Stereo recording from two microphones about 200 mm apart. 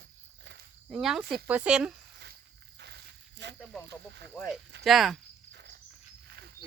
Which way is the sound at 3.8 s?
60° right (ahead or behind).